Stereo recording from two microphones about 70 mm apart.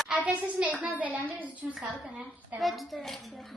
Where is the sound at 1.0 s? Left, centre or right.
Right.